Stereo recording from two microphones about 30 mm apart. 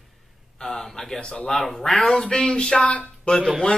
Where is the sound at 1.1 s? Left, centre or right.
Left.